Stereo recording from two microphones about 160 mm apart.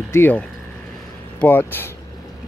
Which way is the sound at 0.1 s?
10° left (ahead or behind).